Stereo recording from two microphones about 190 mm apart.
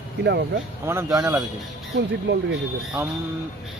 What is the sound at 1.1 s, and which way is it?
Speech, 15° right (ahead or behind).